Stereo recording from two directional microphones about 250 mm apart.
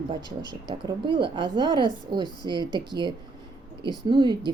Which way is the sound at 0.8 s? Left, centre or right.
Centre.